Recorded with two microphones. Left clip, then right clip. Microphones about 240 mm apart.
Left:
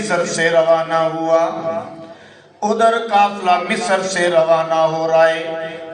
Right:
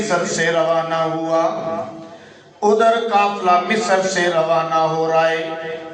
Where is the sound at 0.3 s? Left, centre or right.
Left.